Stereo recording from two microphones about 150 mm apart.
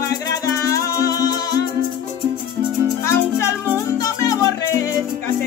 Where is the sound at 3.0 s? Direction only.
20° left (ahead or behind).